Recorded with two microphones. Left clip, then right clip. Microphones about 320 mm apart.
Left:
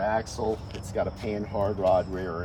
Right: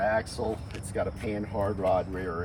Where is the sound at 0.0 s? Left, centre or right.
Centre.